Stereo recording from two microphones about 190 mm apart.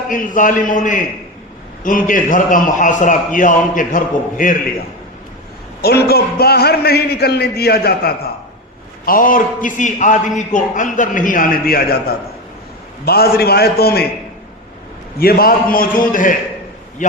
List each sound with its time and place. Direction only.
0.1 s a man's voice: 45° left (ahead or behind)
5.8 s a man's voice: 55° left (ahead or behind)
15.2 s a man's voice: 50° left (ahead or behind)